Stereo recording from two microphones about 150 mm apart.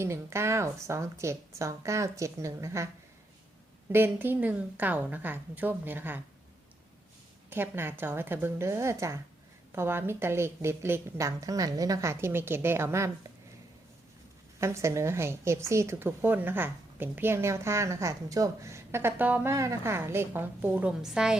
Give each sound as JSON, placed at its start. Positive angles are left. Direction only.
{"t": 0.0, "sound": "a woman's voice", "side_deg": -15}
{"t": 3.9, "sound": "a woman's voice", "side_deg": -15}
{"t": 7.5, "sound": "a woman's voice", "side_deg": -15}
{"t": 14.6, "sound": "a woman's voice", "side_deg": -20}